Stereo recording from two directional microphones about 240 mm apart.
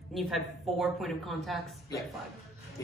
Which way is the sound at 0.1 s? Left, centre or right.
Centre.